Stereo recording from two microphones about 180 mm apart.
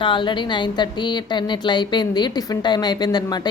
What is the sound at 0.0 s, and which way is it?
A woman's voice, 25° left (ahead or behind).